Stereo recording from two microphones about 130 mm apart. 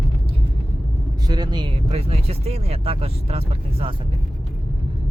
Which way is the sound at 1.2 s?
30° right (ahead or behind).